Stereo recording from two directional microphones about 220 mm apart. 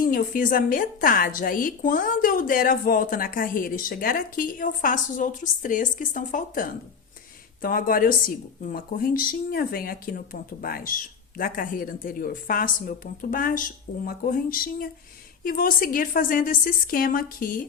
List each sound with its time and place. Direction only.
0.0 s a woman's voice: 40° left (ahead or behind)